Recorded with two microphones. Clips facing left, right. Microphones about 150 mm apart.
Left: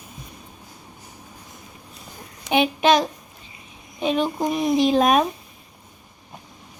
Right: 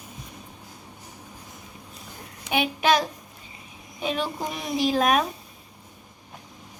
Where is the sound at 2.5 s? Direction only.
25° left (ahead or behind).